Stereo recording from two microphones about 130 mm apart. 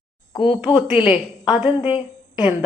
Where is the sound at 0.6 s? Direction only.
5° right (ahead or behind).